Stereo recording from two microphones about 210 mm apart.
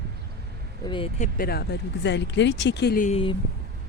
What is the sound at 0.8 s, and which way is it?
Speech, 25° left (ahead or behind).